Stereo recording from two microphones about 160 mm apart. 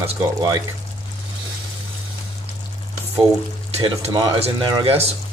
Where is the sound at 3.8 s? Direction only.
35° right (ahead or behind).